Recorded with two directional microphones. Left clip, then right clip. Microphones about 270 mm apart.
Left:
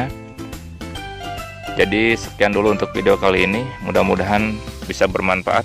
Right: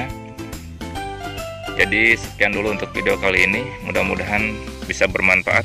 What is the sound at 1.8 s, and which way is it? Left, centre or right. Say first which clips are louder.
Speech: right 1 dB; centre.